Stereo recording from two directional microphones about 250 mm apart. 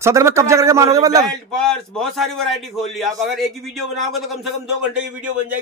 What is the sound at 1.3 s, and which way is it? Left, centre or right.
A man's voice, centre.